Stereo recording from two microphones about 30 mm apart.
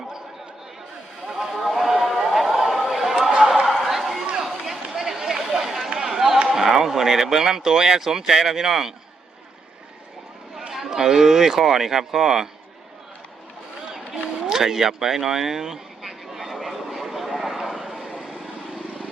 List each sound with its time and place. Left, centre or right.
1.4 s a sound: centre
2.8 s chatter: centre
3.7 s a sound: centre
4.4 s run: centre
4.9 s a sound: centre
5.4 s chatter: centre
6.0 s run: centre
6.5 s a sound: centre
6.8 s speech: centre
10.7 s speech: centre
14.6 s speech: centre
16.6 s vehicle: centre